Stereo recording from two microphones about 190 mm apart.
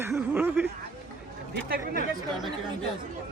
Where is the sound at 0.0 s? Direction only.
10° right (ahead or behind).